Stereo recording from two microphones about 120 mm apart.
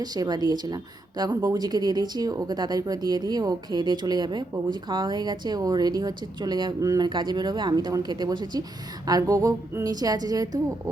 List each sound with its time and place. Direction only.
0.0 s a woman's voice: 35° right (ahead or behind)